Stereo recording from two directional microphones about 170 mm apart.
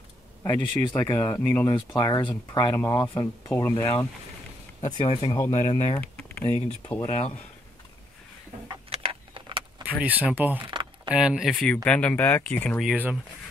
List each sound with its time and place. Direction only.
0.4 s speech: 15° left (ahead or behind)
4.8 s speech: 30° left (ahead or behind)
5.4 s speech: 20° left (ahead or behind)
7.1 s speech: 40° left (ahead or behind)
8.6 s vehicle: 30° right (ahead or behind)
9.8 s speech: 10° right (ahead or behind)
12.9 s speech: 10° right (ahead or behind)